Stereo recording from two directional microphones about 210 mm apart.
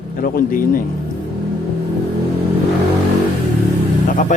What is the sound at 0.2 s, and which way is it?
Speech, 40° left (ahead or behind).